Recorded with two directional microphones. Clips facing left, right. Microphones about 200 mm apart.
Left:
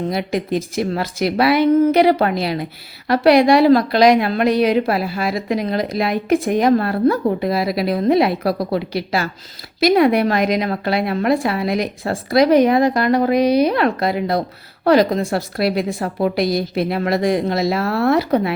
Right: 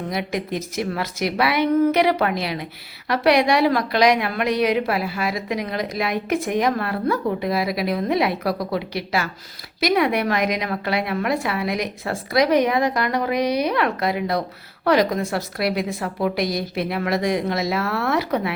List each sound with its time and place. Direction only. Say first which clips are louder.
0.1 s a woman's voice: left 5 dB; 30° left (ahead or behind)